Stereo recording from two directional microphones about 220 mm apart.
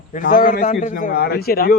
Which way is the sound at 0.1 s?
35° left (ahead or behind).